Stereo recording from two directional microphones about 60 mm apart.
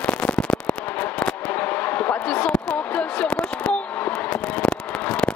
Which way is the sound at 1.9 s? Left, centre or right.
Left.